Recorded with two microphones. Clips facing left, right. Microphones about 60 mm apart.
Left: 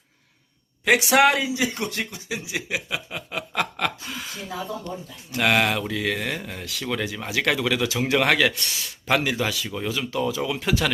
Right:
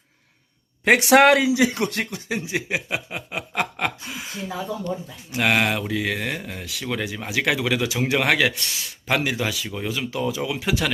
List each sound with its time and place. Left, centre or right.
0.9 s speech: right
2.4 s speech: right
3.2 s speech: centre